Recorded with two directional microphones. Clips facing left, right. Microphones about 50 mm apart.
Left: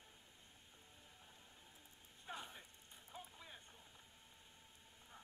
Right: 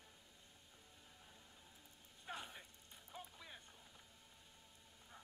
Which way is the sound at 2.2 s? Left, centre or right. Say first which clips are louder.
Right 1 dB; right.